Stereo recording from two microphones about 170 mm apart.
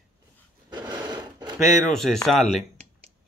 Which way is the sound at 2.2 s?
5° left (ahead or behind).